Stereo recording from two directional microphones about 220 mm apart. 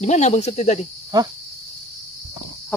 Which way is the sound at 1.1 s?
20° right (ahead or behind).